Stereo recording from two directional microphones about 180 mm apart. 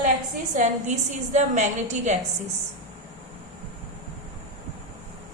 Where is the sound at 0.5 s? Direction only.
45° right (ahead or behind).